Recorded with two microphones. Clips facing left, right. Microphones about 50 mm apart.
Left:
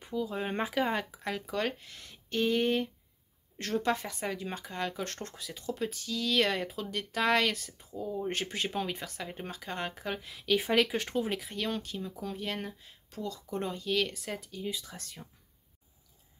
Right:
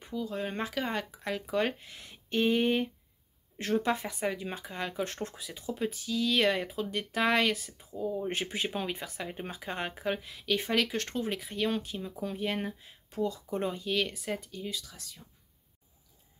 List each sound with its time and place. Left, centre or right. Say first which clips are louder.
0.0 s speech: left 1 dB; centre
1.5 s speech: right 5 dB; centre
10.2 s speech: left 2 dB; centre
11.6 s speech: right 7 dB; centre
14.9 s speech: left 4 dB; left